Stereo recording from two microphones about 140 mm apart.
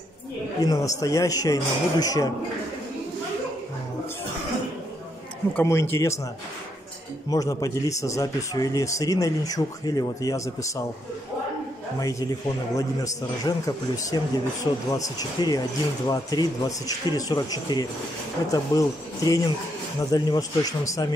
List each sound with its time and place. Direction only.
0.6 s speech: 25° left (ahead or behind)
5.5 s speech: 15° left (ahead or behind)
7.2 s speech: 25° left (ahead or behind)
12.0 s speech: 25° left (ahead or behind)